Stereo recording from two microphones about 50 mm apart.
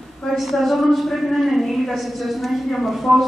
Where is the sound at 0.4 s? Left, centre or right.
Centre.